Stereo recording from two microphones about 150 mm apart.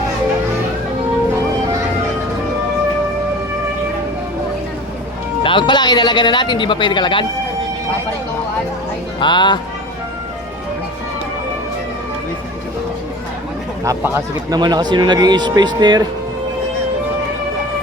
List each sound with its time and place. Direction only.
5.4 s a man's voice: 35° left (ahead or behind)
9.2 s a man's voice: 30° left (ahead or behind)
13.8 s speech: 20° right (ahead or behind)